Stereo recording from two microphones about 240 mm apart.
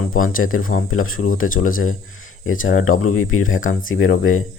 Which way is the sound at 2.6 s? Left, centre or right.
Left.